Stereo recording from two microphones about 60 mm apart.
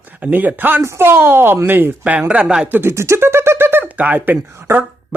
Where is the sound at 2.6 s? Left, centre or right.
Right.